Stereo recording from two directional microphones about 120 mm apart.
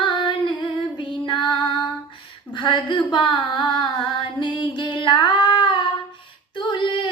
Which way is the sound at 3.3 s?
40° left (ahead or behind).